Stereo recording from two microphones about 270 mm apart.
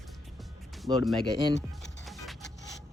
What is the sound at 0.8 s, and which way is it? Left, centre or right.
Speech, centre.